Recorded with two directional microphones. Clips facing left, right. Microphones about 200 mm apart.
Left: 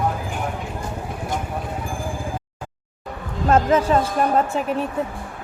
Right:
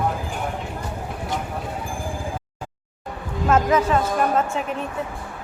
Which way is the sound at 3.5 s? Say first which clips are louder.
Left 2 dB; 30° left (ahead or behind).